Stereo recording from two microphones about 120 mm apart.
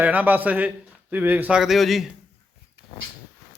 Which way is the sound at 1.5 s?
Centre (ahead or behind).